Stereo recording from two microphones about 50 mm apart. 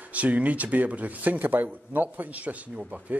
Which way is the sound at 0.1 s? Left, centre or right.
Right.